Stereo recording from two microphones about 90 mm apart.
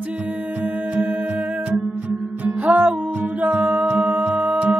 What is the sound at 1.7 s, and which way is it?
Music, 20° right (ahead or behind).